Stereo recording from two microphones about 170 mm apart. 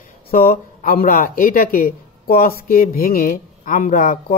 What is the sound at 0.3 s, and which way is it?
Speech, 60° left (ahead or behind).